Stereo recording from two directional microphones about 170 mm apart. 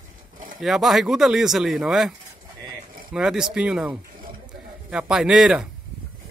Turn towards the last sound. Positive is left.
turn(degrees=0)  # may be behind; listen again after turning